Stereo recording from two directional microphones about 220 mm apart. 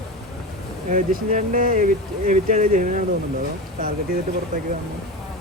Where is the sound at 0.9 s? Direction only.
35° right (ahead or behind).